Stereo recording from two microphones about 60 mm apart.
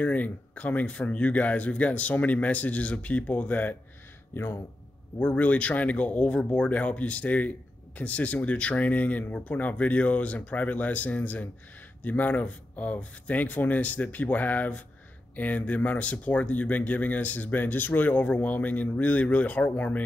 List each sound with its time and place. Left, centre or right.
0.0 s speech: left
4.3 s speech: left
5.2 s speech: left